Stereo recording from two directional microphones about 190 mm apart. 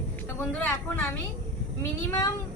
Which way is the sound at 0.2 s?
10° left (ahead or behind).